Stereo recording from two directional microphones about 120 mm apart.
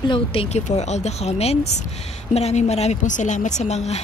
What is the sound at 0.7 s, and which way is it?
A woman's voice, 70° left (ahead or behind).